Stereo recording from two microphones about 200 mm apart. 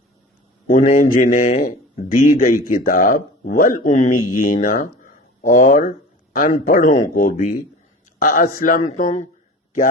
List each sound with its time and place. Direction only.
0.7 s a man's voice: 40° left (ahead or behind)